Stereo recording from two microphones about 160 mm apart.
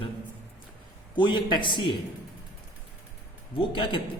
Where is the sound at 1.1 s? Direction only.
30° left (ahead or behind).